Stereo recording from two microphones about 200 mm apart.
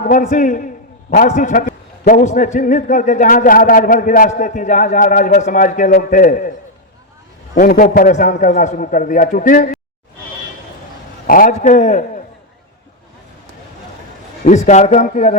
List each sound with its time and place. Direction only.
0.1 s a man's voice: 40° left (ahead or behind)
7.5 s a man's voice: 45° left (ahead or behind)
11.3 s a man's voice: 45° left (ahead or behind)
14.4 s a man's voice: 35° left (ahead or behind)